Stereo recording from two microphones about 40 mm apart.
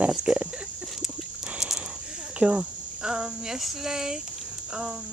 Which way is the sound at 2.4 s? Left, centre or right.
Right.